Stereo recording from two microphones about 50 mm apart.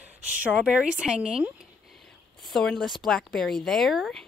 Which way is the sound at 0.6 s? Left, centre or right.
Centre.